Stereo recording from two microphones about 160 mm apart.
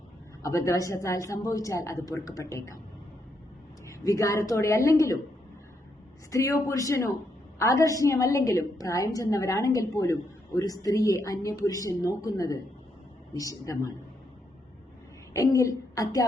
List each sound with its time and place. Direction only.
0.4 s a woman's voice: 20° left (ahead or behind)
3.8 s a woman's voice: 20° left (ahead or behind)
6.3 s a woman's voice: 20° left (ahead or behind)
15.3 s a woman's voice: 20° left (ahead or behind)